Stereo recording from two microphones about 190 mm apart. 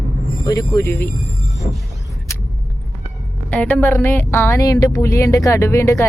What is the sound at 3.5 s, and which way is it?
Speech, 5° left (ahead or behind).